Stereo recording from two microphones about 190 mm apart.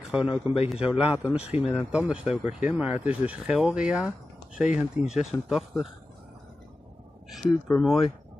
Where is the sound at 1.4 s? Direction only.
30° left (ahead or behind).